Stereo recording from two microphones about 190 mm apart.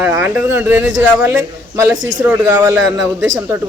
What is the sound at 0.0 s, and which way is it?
Speech, 10° right (ahead or behind).